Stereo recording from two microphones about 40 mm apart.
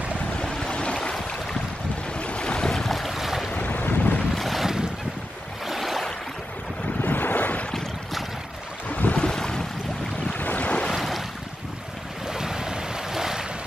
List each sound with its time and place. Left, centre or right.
0.4 s waves: centre
2.1 s boat: left
2.7 s boat: centre
3.1 s boat: centre
3.5 s boat: left
4.4 s boat: centre
5.7 s a sound: centre
7.0 s waves: left
8.8 s boat: left
9.1 s boat: left
10.3 s boat: left
10.6 s boat: left
10.9 s waves: centre
12.3 s boat: centre